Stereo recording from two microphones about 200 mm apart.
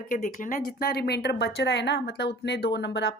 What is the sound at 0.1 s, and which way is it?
Speech, 40° left (ahead or behind).